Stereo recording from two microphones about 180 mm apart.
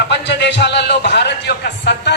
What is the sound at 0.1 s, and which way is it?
A man's voice, 75° left (ahead or behind).